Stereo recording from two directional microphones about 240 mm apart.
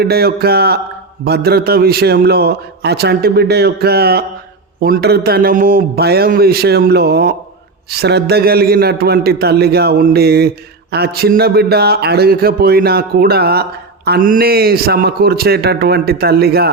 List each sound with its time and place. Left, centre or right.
0.0 s speech: right